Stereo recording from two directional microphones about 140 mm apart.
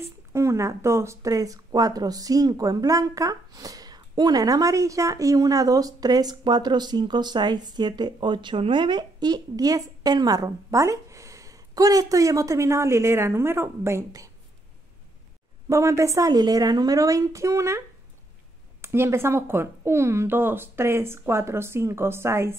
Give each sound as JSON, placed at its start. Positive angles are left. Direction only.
{"t": 0.0, "sound": "speech", "side_deg": -20}
{"t": 15.7, "sound": "speech", "side_deg": -20}